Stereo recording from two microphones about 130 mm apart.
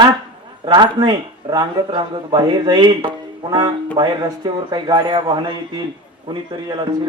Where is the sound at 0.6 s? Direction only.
35° right (ahead or behind).